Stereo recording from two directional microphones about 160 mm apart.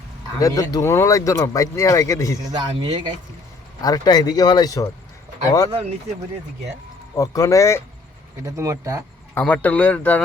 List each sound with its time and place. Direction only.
0.3 s speech: 20° left (ahead or behind)
2.6 s speech: 30° right (ahead or behind)
3.8 s speech: 25° left (ahead or behind)
7.2 s speech: 20° left (ahead or behind)
8.4 s speech: 20° right (ahead or behind)
9.3 s speech: 10° left (ahead or behind)